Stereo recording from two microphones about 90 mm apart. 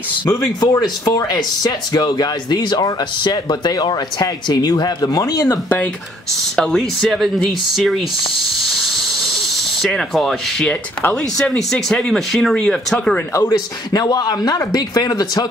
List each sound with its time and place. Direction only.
0.3 s speech: 45° left (ahead or behind)
6.5 s speech: 5° left (ahead or behind)
9.8 s speech: centre (ahead or behind)
10.7 s speech: 15° left (ahead or behind)
13.5 s speech: 50° left (ahead or behind)